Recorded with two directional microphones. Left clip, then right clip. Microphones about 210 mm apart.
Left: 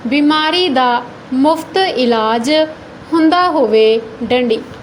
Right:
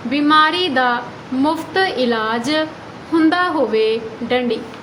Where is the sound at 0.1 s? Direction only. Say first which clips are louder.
Even; 25° left (ahead or behind).